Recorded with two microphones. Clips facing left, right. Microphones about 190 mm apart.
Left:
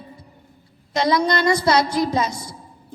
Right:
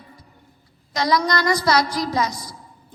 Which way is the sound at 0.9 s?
25° left (ahead or behind).